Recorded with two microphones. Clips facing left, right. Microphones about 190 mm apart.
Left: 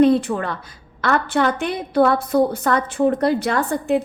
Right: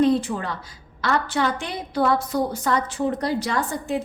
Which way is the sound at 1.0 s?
55° left (ahead or behind).